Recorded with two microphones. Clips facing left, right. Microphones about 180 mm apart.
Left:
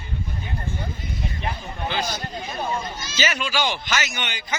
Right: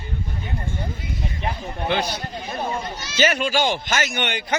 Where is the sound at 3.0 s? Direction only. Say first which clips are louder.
Right 9 dB; 55° right (ahead or behind).